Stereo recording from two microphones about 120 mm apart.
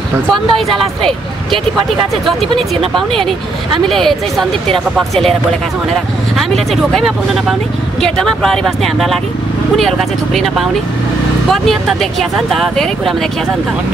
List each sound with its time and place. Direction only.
0.3 s speech: centre (ahead or behind)
2.5 s speech: 50° right (ahead or behind)
3.9 s speech: centre (ahead or behind)
6.3 s speech: 5° left (ahead or behind)